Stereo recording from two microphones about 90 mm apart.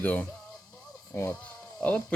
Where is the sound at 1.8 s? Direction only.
15° left (ahead or behind).